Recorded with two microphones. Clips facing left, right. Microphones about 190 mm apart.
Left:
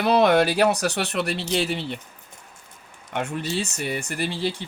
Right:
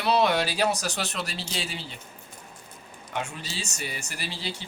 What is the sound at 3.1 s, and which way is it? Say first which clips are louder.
Speech: left 7 dB; 60° left (ahead or behind).